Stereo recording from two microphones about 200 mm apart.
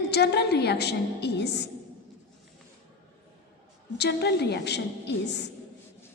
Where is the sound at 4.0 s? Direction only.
55° left (ahead or behind).